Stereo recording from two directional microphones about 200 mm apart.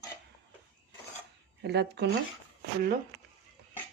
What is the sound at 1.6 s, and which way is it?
Speech, 55° right (ahead or behind).